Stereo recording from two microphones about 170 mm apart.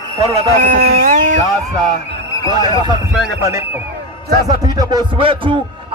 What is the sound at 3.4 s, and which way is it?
A man's voice, 15° right (ahead or behind).